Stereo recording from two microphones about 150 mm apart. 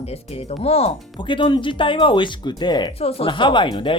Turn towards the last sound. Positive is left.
turn(degrees=35)  # may be behind; listen again after turning